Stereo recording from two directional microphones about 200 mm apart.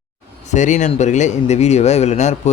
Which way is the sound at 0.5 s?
35° left (ahead or behind).